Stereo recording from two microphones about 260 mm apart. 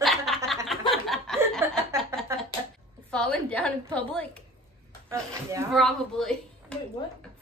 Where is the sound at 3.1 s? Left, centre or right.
Centre.